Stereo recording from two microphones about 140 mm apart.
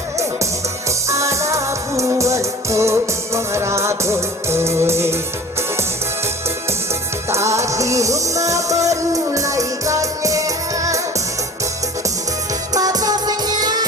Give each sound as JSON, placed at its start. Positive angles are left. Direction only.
{"t": 0.9, "sound": "music", "side_deg": -20}
{"t": 7.3, "sound": "music", "side_deg": -20}
{"t": 12.7, "sound": "music", "side_deg": -25}